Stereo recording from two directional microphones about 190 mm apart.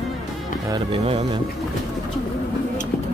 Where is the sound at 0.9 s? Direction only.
30° right (ahead or behind).